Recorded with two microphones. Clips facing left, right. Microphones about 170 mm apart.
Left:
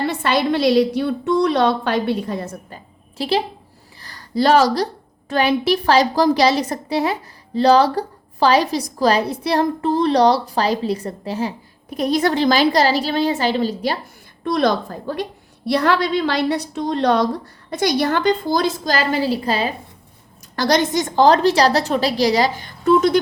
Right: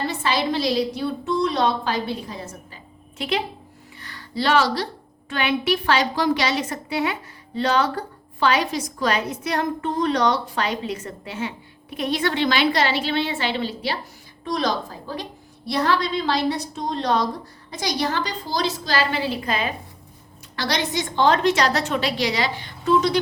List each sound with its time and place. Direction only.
0.1 s a woman's voice: 60° left (ahead or behind)
3.2 s a woman's voice: 35° left (ahead or behind)
14.4 s a woman's voice: 55° left (ahead or behind); by 19.7 s 35° left (ahead or behind)
20.6 s a woman's voice: 45° left (ahead or behind)